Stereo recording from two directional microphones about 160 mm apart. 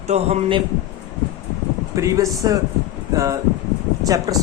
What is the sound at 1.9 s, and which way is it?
Speech, 20° right (ahead or behind).